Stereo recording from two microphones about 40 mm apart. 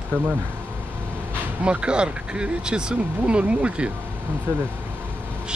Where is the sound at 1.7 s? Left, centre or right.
Right.